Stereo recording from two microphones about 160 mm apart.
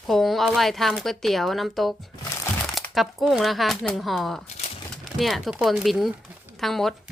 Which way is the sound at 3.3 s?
Centre (ahead or behind).